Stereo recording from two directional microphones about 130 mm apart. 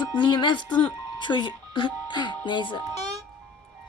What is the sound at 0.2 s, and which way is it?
Speech, 35° left (ahead or behind).